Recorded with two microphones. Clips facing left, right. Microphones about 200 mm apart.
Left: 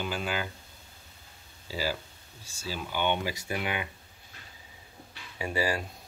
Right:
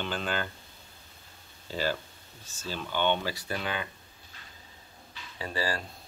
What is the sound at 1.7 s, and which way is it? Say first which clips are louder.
Speech: right 2 dB; 10° left (ahead or behind).